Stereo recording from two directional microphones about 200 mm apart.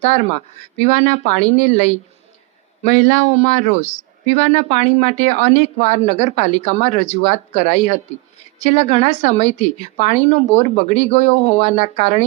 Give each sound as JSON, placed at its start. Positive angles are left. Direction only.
{"t": 0.8, "sound": "speech", "side_deg": 35}